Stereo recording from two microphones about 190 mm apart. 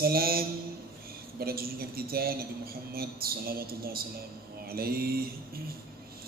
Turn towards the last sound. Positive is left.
turn(degrees=-50)  # may be behind; listen again after turning